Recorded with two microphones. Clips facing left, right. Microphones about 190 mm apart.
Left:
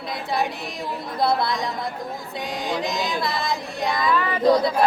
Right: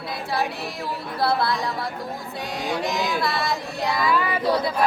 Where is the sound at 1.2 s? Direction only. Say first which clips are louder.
Left 1 dB; 20° left (ahead or behind).